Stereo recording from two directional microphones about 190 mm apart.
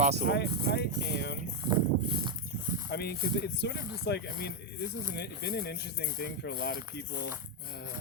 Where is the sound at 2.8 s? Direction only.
60° left (ahead or behind).